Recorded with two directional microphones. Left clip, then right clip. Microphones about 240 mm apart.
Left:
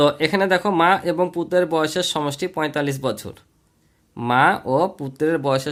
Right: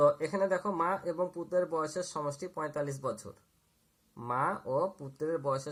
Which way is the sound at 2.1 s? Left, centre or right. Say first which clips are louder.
Left 13 dB; left.